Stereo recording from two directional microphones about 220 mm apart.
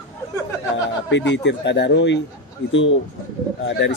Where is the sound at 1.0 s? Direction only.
55° left (ahead or behind).